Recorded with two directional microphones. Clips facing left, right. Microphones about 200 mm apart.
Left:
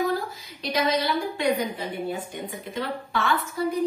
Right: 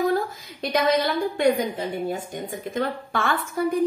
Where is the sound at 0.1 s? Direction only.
50° right (ahead or behind).